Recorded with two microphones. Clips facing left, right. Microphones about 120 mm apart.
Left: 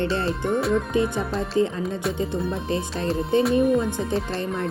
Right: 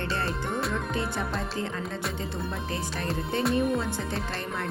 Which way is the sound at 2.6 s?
25° left (ahead or behind).